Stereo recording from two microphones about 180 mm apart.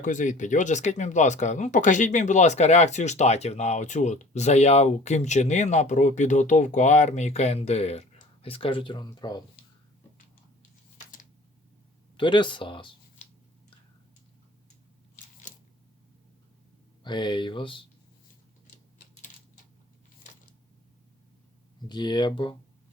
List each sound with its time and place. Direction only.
0.0 s speech: 45° left (ahead or behind); by 9.4 s 20° left (ahead or behind)
12.1 s speech: 25° left (ahead or behind)
17.0 s speech: 25° left (ahead or behind)
21.8 s speech: 25° left (ahead or behind)